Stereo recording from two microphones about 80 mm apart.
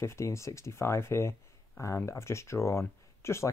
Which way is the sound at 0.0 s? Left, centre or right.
Left.